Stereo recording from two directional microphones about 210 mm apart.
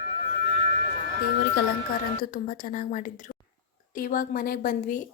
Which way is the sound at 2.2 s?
40° left (ahead or behind).